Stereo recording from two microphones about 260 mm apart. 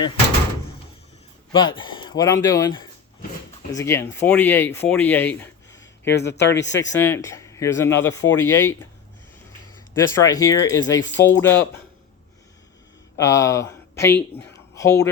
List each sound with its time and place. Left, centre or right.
1.5 s speech: centre
5.7 s a man's voice: left
6.9 s speech: centre
9.9 s speech: centre
13.1 s speech: centre